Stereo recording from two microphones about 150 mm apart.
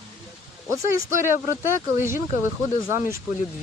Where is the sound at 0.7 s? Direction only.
20° right (ahead or behind).